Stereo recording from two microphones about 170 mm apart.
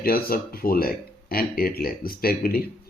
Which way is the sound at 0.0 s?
60° left (ahead or behind).